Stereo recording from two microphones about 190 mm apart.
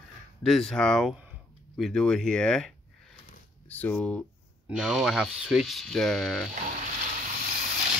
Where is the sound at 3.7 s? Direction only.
10° left (ahead or behind).